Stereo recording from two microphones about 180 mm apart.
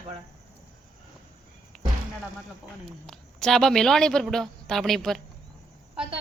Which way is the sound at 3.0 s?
5° left (ahead or behind).